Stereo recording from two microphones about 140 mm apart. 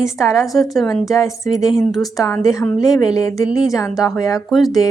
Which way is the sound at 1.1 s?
20° left (ahead or behind).